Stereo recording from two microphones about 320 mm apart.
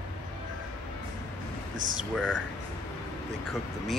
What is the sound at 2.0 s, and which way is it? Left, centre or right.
Speech, centre.